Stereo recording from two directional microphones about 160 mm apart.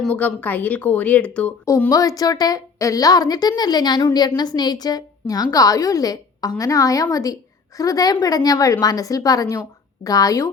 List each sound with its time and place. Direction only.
0.0 s speech: 10° left (ahead or behind)
1.6 s a woman's voice: 20° left (ahead or behind)